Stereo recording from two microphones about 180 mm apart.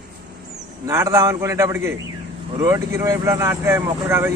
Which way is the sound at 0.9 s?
15° right (ahead or behind).